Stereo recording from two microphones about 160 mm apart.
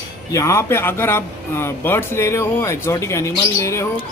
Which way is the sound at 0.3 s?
20° left (ahead or behind).